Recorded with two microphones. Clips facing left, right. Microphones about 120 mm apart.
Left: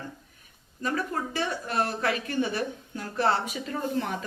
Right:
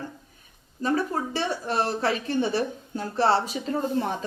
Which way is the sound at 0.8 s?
30° right (ahead or behind).